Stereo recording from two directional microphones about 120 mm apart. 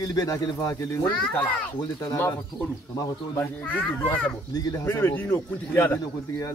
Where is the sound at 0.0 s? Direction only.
30° left (ahead or behind).